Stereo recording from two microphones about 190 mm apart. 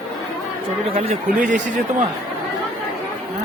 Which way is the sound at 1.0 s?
35° right (ahead or behind).